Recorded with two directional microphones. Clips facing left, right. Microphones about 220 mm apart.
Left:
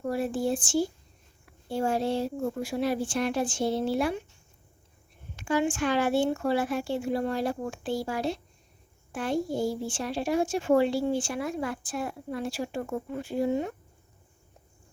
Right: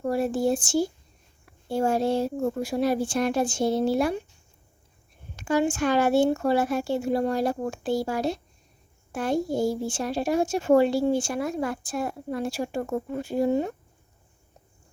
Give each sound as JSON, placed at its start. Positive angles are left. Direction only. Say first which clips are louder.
{"t": 0.0, "sound": "a child's voice", "louder": "right 4 dB", "side_deg": -40}
{"t": 5.4, "sound": "a child's voice", "louder": "right 3 dB", "side_deg": -40}